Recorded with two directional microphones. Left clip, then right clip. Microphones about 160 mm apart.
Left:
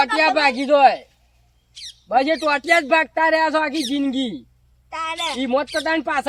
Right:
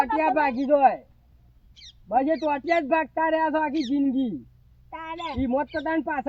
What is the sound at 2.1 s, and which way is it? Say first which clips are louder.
Speech: left 5 dB; 10° left (ahead or behind).